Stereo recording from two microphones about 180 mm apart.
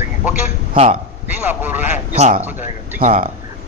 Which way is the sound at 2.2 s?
40° right (ahead or behind).